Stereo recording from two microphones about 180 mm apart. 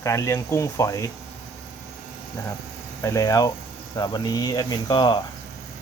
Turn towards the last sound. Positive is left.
turn(degrees=25)  # may be behind; listen again after turning